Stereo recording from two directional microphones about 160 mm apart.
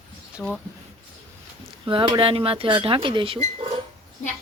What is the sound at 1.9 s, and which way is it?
Speech, 30° right (ahead or behind).